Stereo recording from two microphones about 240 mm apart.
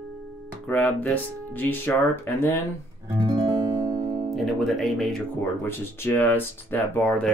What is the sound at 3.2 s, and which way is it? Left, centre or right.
Music, centre.